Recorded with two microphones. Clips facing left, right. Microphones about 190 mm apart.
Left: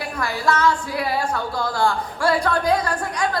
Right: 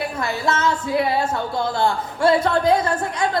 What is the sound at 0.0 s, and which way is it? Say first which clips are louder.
Speech: even; 25° right (ahead or behind).